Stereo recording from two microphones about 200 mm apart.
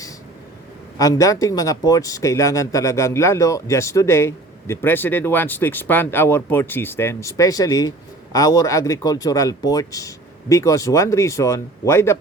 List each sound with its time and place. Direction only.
0.9 s speech: 15° left (ahead or behind)